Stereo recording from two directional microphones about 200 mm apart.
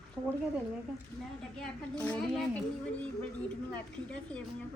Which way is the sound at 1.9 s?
5° left (ahead or behind).